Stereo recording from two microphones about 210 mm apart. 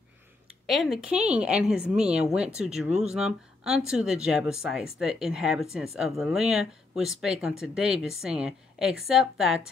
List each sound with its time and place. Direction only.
0.7 s speech: centre (ahead or behind)